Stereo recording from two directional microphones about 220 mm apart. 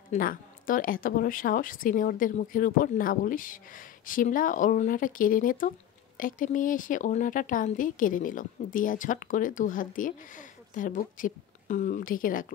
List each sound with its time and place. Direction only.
0.1 s a woman's voice: 40° left (ahead or behind)